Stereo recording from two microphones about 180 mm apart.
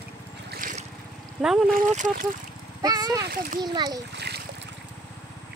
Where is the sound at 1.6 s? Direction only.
45° right (ahead or behind).